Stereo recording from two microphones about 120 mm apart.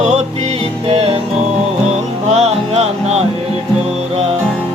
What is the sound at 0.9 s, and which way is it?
Music, 60° right (ahead or behind).